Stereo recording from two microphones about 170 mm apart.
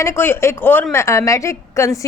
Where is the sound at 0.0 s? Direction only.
15° left (ahead or behind).